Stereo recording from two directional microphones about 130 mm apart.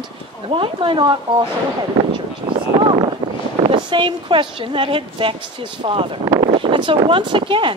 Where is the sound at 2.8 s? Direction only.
40° right (ahead or behind).